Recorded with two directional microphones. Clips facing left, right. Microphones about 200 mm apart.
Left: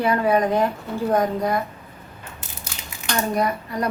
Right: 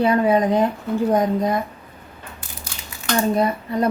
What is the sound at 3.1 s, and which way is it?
Speech, 25° right (ahead or behind).